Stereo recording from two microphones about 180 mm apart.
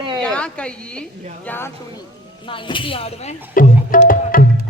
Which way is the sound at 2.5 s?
30° left (ahead or behind).